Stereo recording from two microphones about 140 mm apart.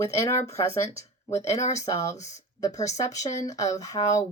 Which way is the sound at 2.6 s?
25° left (ahead or behind).